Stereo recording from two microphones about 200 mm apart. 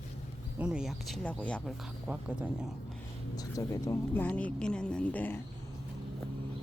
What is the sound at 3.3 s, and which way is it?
Speech, 15° left (ahead or behind).